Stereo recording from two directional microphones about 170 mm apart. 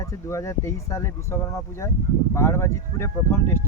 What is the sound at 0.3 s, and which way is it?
Speech, 15° left (ahead or behind).